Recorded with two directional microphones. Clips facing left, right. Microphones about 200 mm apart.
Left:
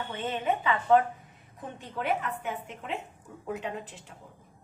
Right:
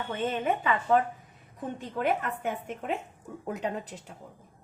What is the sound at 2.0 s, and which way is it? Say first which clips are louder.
A woman's voice: right 2 dB; 50° right (ahead or behind).